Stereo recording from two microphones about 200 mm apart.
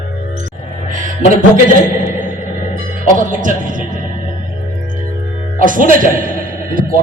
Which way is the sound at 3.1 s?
40° right (ahead or behind).